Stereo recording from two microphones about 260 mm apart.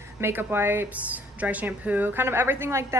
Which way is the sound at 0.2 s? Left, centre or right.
Centre.